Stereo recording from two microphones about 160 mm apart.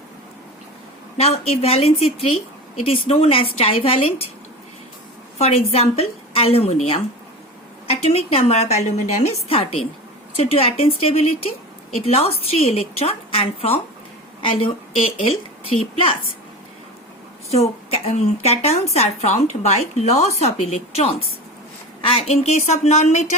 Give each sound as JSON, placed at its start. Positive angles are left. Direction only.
{"t": 1.1, "sound": "a woman's voice", "side_deg": 40}
{"t": 5.4, "sound": "a woman's voice", "side_deg": 40}
{"t": 17.5, "sound": "a woman's voice", "side_deg": 40}